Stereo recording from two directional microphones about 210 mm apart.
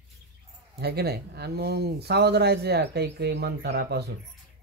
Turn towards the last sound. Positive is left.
turn(degrees=-50)  # may be behind; listen again after turning